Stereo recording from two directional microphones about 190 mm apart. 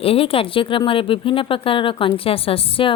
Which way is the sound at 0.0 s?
30° left (ahead or behind).